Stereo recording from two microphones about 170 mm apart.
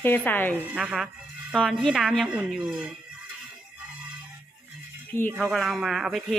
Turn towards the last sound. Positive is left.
turn(degrees=0)  # may be behind; listen again after turning